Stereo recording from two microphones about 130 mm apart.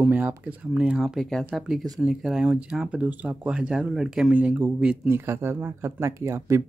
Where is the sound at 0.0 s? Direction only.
15° right (ahead or behind).